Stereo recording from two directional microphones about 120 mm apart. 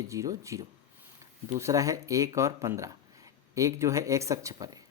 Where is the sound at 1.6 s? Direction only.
25° right (ahead or behind).